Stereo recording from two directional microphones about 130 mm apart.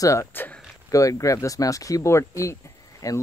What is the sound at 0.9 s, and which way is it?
Speech, 25° left (ahead or behind).